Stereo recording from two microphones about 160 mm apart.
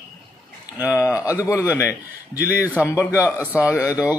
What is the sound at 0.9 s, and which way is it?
Speech, 20° left (ahead or behind).